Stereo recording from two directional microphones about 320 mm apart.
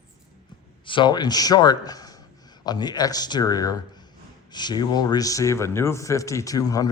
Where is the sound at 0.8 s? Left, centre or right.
Centre.